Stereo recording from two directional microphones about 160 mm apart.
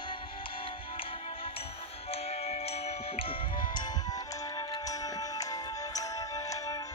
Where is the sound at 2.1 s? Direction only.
40° left (ahead or behind).